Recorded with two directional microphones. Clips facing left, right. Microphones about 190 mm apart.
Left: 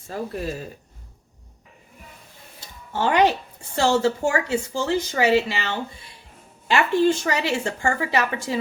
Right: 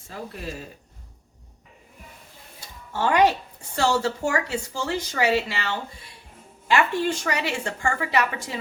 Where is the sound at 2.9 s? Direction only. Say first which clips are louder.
Left 1 dB; 25° left (ahead or behind).